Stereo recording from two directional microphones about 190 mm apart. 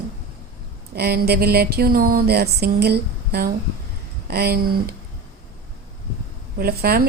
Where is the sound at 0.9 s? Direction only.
55° right (ahead or behind).